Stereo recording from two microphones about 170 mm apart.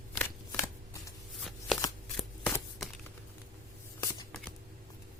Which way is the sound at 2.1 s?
Centre (ahead or behind).